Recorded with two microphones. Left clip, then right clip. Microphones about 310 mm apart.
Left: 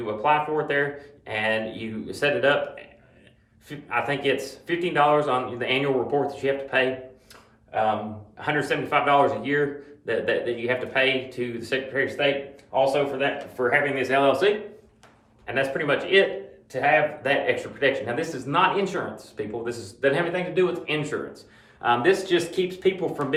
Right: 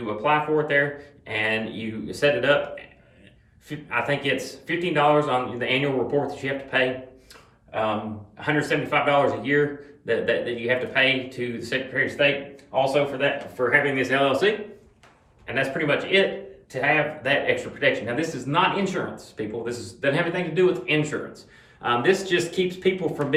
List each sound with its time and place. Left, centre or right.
0.2 s speech: centre
8.4 s speech: centre